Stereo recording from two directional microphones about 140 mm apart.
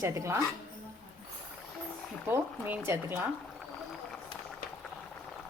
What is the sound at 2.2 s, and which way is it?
Speech, 15° right (ahead or behind).